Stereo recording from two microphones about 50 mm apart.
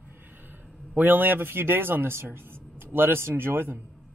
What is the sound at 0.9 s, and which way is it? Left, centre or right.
Speech, right.